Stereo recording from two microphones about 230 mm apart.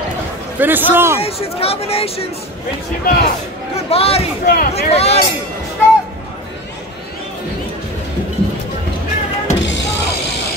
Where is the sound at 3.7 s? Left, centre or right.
Left.